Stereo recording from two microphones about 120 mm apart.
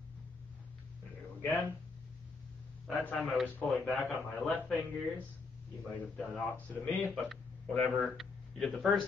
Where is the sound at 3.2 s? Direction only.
Centre (ahead or behind).